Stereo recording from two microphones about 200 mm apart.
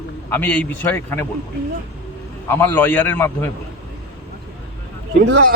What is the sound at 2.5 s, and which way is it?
A man's voice, 10° left (ahead or behind).